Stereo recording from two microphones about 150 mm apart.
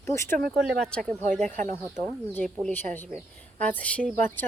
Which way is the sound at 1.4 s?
55° right (ahead or behind).